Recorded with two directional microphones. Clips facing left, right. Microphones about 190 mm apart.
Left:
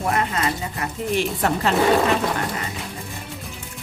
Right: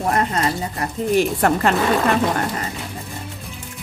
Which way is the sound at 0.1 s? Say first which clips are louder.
Right 3 dB; 40° right (ahead or behind).